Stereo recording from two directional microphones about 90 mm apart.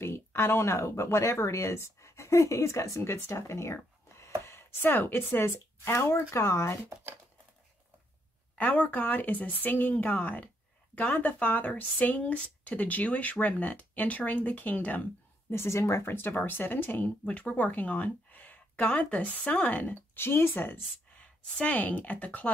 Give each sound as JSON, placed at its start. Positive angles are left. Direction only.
{"t": 0.0, "sound": "speech", "side_deg": 30}
{"t": 8.5, "sound": "a woman's voice", "side_deg": 15}
{"t": 15.5, "sound": "a woman's voice", "side_deg": 30}